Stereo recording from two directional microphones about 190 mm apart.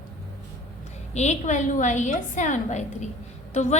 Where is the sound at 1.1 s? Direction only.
35° left (ahead or behind).